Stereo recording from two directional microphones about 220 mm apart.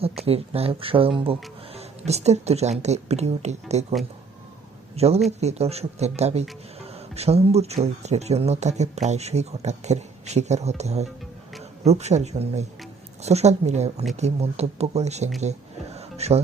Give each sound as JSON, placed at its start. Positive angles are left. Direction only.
{"t": 0.0, "sound": "speech", "side_deg": -25}
{"t": 4.9, "sound": "speech", "side_deg": -30}
{"t": 16.0, "sound": "a sound", "side_deg": -30}